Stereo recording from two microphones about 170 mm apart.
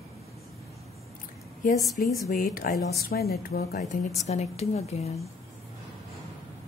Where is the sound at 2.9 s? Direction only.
65° left (ahead or behind).